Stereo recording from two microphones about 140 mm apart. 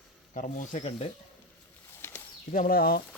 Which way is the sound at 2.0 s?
15° left (ahead or behind).